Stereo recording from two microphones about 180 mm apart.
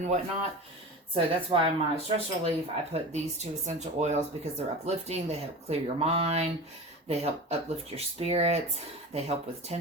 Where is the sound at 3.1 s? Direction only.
40° right (ahead or behind).